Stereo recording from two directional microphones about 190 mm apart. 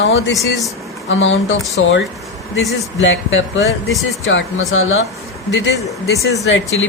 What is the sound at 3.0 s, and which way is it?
Speech, 80° left.